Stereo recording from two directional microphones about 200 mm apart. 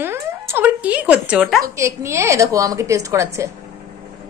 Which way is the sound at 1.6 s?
15° right (ahead or behind).